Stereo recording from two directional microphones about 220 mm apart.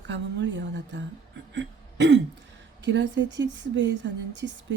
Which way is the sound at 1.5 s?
55° right (ahead or behind).